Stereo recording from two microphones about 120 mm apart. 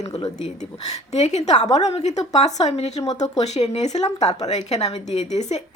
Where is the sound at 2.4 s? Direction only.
70° left (ahead or behind).